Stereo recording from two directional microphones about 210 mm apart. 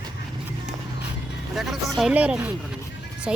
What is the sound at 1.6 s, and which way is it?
Speech, centre (ahead or behind).